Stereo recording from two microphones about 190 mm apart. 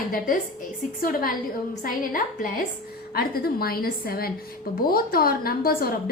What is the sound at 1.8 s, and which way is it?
A woman's voice, 45° left (ahead or behind).